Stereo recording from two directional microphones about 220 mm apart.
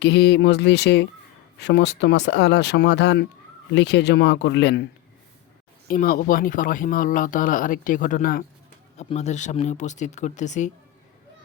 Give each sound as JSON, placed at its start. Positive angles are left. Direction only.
{"t": 0.0, "sound": "speech", "side_deg": 50}
{"t": 5.9, "sound": "speech", "side_deg": 40}